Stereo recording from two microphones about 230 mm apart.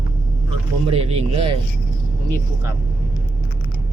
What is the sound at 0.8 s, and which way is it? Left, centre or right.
Speech, right.